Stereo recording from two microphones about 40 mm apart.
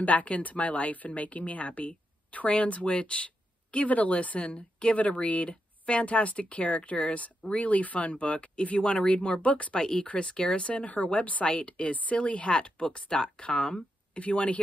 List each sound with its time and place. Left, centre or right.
0.0 s speech: left
9.8 s speech: centre; by 11.4 s left
11.4 s speech: left